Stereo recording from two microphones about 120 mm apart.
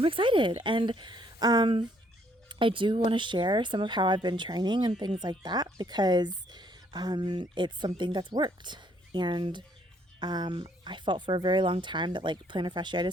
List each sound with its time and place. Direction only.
0.0 s a woman's voice: 45° right (ahead or behind)